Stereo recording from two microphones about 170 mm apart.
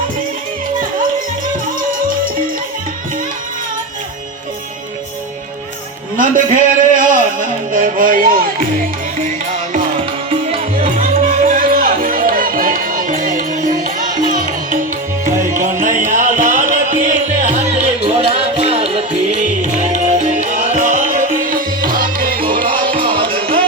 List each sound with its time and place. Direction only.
6.1 s a sound: 50° right (ahead or behind)
7.7 s music: 50° right (ahead or behind)
10.2 s music: 35° right (ahead or behind)
10.8 s music: 55° right (ahead or behind)
15.8 s music: 50° right (ahead or behind)
22.7 s music: 30° right (ahead or behind)